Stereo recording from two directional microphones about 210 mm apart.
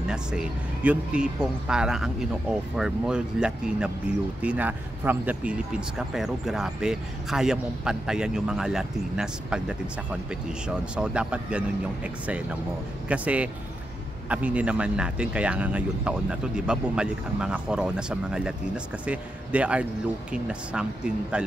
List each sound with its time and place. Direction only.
0.1 s speech: 5° right (ahead or behind)
11.0 s speech: 5° right (ahead or behind)